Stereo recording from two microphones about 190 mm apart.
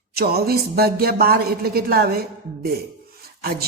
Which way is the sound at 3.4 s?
55° right (ahead or behind).